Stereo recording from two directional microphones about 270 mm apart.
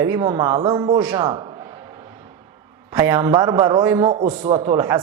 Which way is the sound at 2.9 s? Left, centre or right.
Centre.